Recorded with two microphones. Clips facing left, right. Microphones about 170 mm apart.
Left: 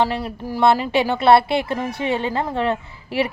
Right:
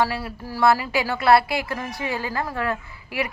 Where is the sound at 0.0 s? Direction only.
20° left (ahead or behind).